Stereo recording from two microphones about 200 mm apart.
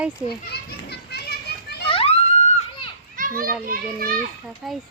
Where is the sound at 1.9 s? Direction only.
30° left (ahead or behind).